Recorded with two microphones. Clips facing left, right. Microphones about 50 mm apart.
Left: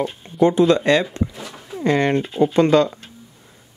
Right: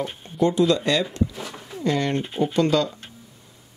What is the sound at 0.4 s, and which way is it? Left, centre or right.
Speech, left.